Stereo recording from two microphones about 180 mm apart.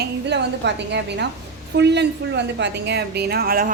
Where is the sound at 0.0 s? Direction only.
70° right (ahead or behind).